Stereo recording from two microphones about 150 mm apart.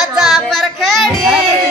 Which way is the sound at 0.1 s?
Centre (ahead or behind).